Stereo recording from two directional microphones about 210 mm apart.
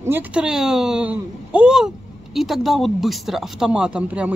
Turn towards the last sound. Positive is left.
turn(degrees=-5)  # may be behind; listen again after turning